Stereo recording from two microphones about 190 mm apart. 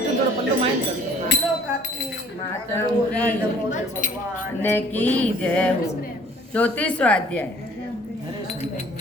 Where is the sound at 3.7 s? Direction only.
45° left (ahead or behind).